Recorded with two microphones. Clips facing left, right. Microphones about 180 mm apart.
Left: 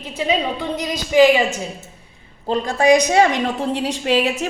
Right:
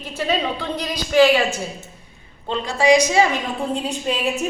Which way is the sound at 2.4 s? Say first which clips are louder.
Left 2 dB; 45° left (ahead or behind).